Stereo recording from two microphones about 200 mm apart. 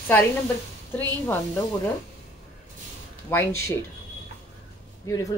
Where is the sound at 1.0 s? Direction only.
10° left (ahead or behind).